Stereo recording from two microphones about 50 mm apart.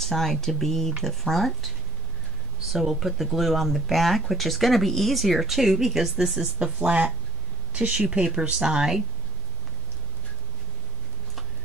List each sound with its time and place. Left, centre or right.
0.0 s speech: centre
2.7 s speech: centre
6.6 s speech: right